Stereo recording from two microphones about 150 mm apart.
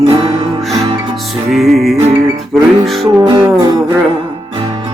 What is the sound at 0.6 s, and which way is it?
Music, centre (ahead or behind).